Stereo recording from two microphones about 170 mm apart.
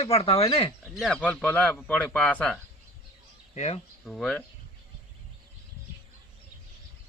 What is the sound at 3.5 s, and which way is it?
Speech, 40° left (ahead or behind).